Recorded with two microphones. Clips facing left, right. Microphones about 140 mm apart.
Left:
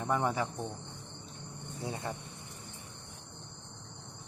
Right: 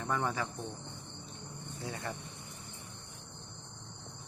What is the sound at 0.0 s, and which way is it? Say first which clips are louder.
Cricket: left 3 dB; 20° left (ahead or behind).